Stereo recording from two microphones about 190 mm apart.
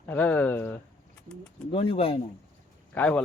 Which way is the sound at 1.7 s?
30° left (ahead or behind).